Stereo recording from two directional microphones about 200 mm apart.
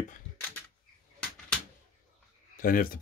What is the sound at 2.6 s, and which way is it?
Speech, 45° left (ahead or behind).